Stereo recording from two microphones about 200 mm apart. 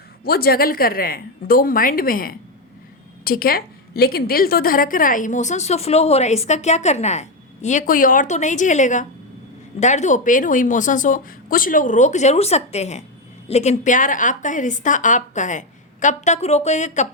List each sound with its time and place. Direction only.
0.3 s a woman's voice: 50° left (ahead or behind)